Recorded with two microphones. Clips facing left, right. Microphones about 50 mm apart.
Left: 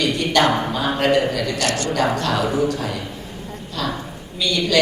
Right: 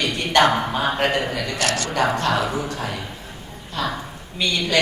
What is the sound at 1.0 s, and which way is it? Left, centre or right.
A man's voice, right.